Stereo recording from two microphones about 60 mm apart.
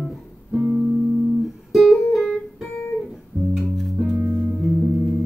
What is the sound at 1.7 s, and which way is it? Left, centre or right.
Music, centre.